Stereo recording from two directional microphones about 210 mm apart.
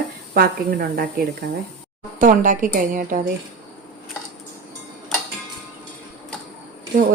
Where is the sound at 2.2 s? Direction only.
40° right (ahead or behind).